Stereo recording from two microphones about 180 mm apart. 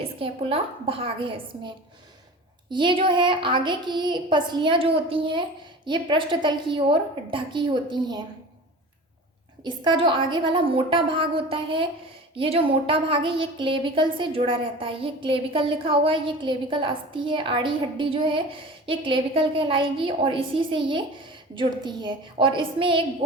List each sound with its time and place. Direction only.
0.2 s a woman's voice: 30° right (ahead or behind)
9.6 s a woman's voice: 25° right (ahead or behind)